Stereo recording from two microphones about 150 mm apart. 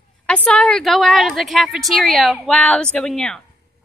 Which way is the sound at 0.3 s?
10° left (ahead or behind).